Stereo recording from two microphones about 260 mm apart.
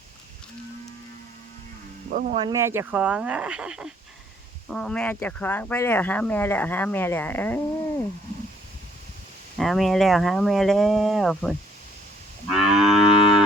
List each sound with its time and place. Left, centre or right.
2.0 s speech: right
2.4 s speech: centre
9.6 s speech: centre
12.5 s moo: centre